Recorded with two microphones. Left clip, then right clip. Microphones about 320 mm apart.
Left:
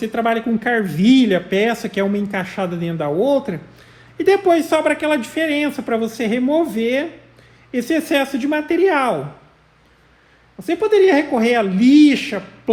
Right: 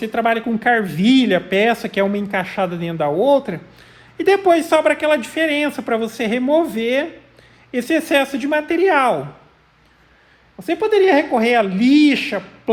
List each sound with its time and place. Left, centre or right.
0.0 s speech: right
10.6 s speech: right